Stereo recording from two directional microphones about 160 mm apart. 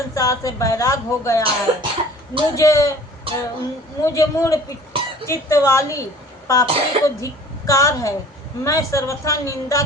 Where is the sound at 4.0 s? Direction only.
20° left (ahead or behind).